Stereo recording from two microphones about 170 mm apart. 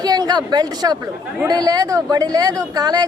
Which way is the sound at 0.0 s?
25° right (ahead or behind).